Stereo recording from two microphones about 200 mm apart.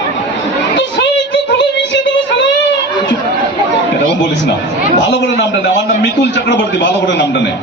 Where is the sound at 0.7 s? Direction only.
60° left (ahead or behind).